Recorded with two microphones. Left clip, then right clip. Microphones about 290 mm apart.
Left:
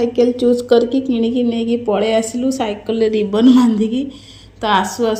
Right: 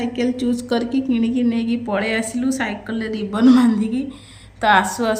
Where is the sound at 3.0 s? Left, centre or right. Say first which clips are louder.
Left 6 dB; centre.